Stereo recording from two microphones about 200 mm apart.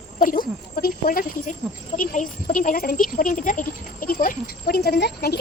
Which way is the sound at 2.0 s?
40° left (ahead or behind).